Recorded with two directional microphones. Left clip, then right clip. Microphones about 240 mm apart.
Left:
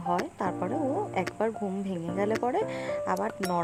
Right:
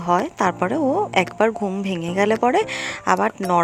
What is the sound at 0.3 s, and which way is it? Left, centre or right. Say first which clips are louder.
Speech: right 10 dB; centre.